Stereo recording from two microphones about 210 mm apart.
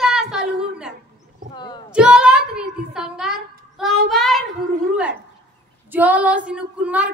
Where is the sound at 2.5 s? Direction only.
5° right (ahead or behind).